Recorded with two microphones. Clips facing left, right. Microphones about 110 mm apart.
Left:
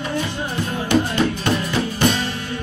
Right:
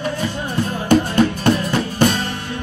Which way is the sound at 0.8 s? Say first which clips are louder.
Right 4 dB; 45° right (ahead or behind).